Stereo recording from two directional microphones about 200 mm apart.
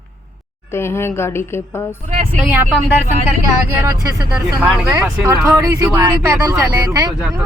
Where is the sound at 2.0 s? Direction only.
35° right (ahead or behind).